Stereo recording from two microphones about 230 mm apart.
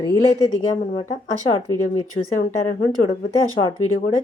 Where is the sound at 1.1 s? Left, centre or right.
Centre.